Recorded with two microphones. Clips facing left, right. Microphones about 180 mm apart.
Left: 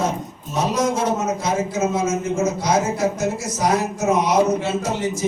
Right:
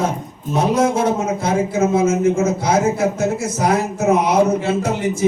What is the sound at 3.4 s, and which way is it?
Speech, 55° right (ahead or behind).